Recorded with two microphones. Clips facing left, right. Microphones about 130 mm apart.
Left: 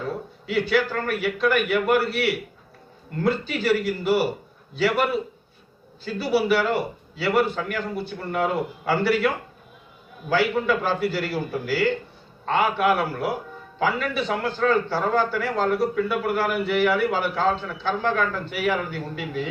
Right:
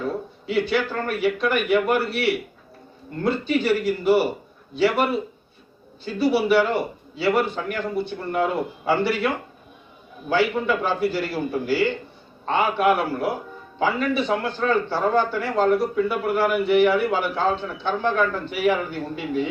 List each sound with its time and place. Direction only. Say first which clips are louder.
0.4 s a man's voice: even; 20° right (ahead or behind)
6.2 s a man's voice: right 2 dB; 20° right (ahead or behind)